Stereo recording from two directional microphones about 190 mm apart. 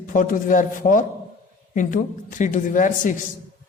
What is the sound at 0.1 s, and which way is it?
A woman's voice, 45° left (ahead or behind).